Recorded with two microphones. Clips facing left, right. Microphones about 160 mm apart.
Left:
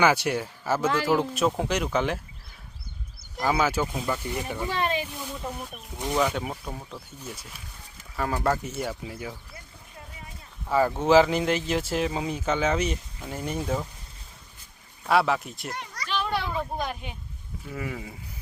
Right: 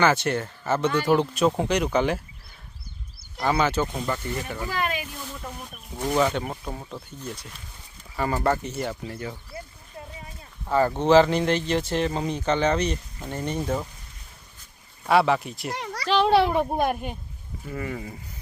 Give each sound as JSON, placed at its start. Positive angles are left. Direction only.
{"t": 0.0, "sound": "speech", "side_deg": 10}
{"t": 3.3, "sound": "speech", "side_deg": 5}
{"t": 4.7, "sound": "speech", "side_deg": 30}
{"t": 5.1, "sound": "snake", "side_deg": 10}
{"t": 6.1, "sound": "speech", "side_deg": 0}
{"t": 10.7, "sound": "speech", "side_deg": 5}
{"t": 15.0, "sound": "speech", "side_deg": 0}
{"t": 15.7, "sound": "a child's voice", "side_deg": -75}
{"t": 17.7, "sound": "speech", "side_deg": 5}